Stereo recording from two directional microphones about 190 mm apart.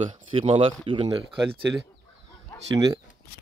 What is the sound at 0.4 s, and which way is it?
Speech, 30° right (ahead or behind).